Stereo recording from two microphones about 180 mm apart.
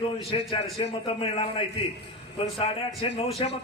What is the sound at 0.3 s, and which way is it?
A man's voice, 30° left (ahead or behind).